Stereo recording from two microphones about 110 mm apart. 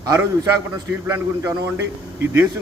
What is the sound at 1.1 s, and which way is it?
Speech, 30° right (ahead or behind).